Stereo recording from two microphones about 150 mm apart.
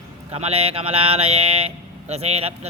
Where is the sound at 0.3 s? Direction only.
40° right (ahead or behind).